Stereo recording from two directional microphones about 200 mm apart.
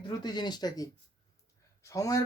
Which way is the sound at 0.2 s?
20° left (ahead or behind).